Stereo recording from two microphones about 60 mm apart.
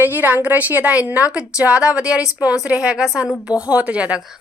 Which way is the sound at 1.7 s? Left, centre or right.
Left.